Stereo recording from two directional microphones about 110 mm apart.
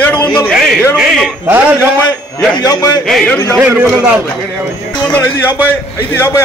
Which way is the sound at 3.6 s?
15° right (ahead or behind).